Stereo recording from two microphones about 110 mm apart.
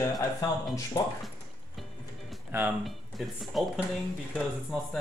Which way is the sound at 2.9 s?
Centre (ahead or behind).